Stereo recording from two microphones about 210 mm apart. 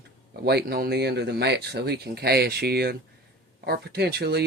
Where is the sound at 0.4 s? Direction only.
50° right (ahead or behind).